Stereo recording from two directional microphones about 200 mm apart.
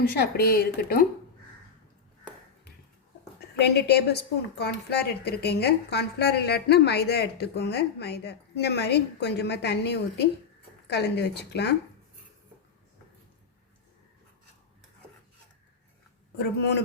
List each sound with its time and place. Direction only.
0.0 s a woman's voice: 50° left (ahead or behind)
3.8 s a woman's voice: 55° left (ahead or behind)
16.4 s a woman's voice: 55° left (ahead or behind)